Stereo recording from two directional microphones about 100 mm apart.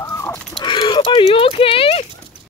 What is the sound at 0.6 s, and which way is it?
Horse, 50° left (ahead or behind).